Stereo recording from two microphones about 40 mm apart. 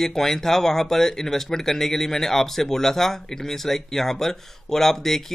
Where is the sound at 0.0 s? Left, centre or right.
Centre.